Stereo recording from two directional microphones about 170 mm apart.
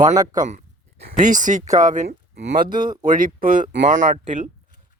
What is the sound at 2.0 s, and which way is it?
Speech, 65° right (ahead or behind).